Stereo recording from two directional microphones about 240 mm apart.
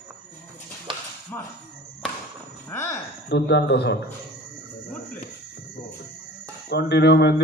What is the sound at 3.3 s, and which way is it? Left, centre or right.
Speech, left.